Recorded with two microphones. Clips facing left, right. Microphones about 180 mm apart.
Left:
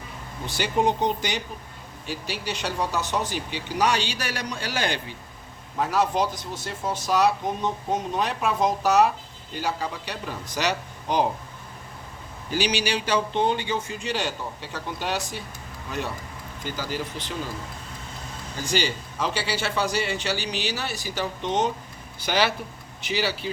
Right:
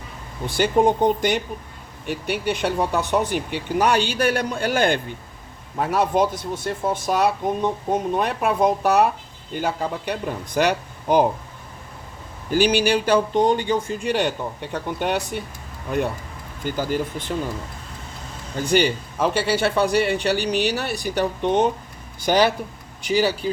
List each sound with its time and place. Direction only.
0.4 s speech: 50° right (ahead or behind)
12.5 s speech: 50° right (ahead or behind)
16.6 s speech: 50° right (ahead or behind)
18.6 s speech: 55° right (ahead or behind)
22.2 s speech: 45° right (ahead or behind)